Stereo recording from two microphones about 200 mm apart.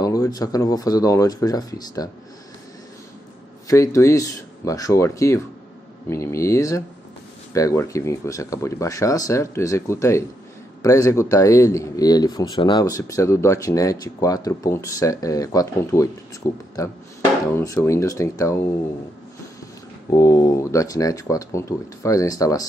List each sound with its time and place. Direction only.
0.0 s speech: 15° left (ahead or behind)
3.6 s speech: 15° left (ahead or behind)
20.1 s speech: 20° left (ahead or behind)